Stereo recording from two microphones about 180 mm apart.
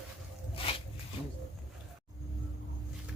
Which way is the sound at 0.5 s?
30° left (ahead or behind).